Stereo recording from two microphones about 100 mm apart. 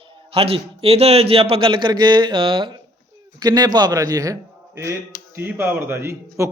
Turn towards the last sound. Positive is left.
turn(degrees=-30)  # may be behind; listen again after turning